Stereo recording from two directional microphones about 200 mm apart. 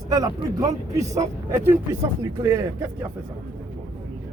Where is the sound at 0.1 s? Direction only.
20° right (ahead or behind).